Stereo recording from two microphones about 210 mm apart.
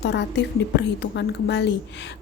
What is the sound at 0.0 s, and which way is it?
A woman's voice, 55° left (ahead or behind).